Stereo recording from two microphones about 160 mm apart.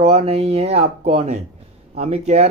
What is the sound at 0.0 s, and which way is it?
Speech, 40° right (ahead or behind).